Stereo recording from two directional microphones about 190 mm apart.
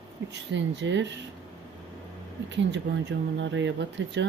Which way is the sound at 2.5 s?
70° right (ahead or behind).